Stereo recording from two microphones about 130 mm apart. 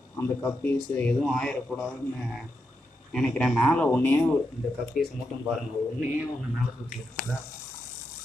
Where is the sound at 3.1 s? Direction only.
5° left (ahead or behind).